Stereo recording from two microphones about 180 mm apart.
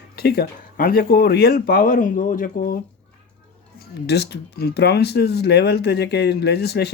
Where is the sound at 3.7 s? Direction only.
65° left (ahead or behind).